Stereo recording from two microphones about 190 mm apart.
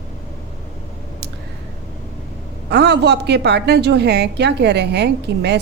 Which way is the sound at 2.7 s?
60° right (ahead or behind).